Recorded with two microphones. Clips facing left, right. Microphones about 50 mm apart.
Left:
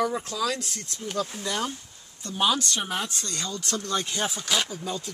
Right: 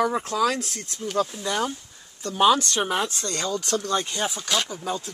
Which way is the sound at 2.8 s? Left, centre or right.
Right.